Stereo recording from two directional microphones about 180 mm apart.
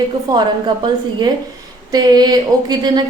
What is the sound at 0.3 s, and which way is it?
Speech, 20° right (ahead or behind).